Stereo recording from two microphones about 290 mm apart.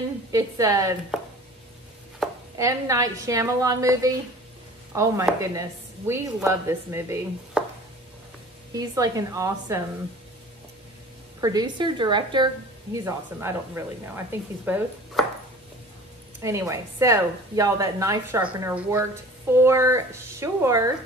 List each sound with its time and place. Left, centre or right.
0.3 s speech: centre
2.5 s speech: centre
8.7 s speech: centre
11.4 s speech: centre
16.3 s speech: centre